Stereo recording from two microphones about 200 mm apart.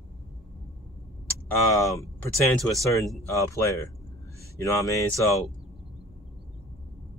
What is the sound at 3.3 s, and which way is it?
Speech, 15° left (ahead or behind).